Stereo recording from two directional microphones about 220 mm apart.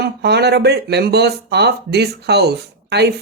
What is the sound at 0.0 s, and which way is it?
Speech, 50° right (ahead or behind).